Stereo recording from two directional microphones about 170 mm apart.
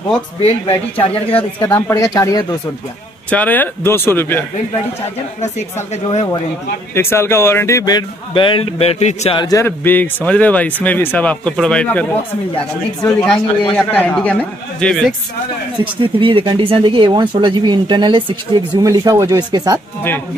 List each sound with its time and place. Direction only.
0.4 s speech: 35° left (ahead or behind)
1.6 s speech: 15° left (ahead or behind)
3.3 s a man's voice: 10° left (ahead or behind)
6.0 s speech: 35° left (ahead or behind)
6.9 s speech: 15° left (ahead or behind); by 9.4 s 40° left (ahead or behind)
9.4 s a man's voice: 20° left (ahead or behind)
16.2 s speech: 30° right (ahead or behind)